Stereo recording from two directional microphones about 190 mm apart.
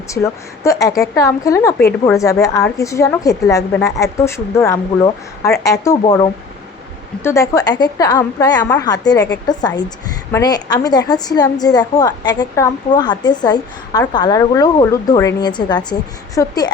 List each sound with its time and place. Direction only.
0.1 s a woman's voice: 15° left (ahead or behind)